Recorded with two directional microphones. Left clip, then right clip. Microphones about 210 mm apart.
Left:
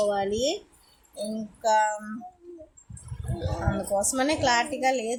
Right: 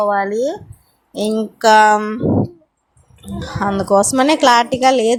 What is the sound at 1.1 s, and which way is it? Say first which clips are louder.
Speech: right 15 dB; 40° right (ahead or behind).